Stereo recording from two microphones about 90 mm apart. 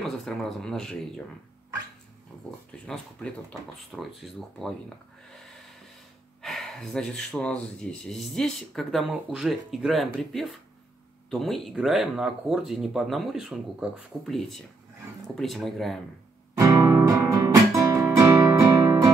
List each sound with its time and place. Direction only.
0.0 s speech: 5° left (ahead or behind)
2.9 s speech: 10° left (ahead or behind)
3.9 s speech: centre (ahead or behind)
6.4 s speech: 5° left (ahead or behind)
16.5 s music: 35° right (ahead or behind)